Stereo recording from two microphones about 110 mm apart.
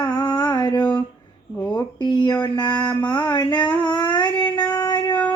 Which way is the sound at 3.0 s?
40° left (ahead or behind).